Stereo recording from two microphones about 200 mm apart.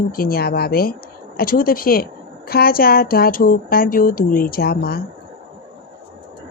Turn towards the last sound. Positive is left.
turn(degrees=50)  # may be behind; listen again after turning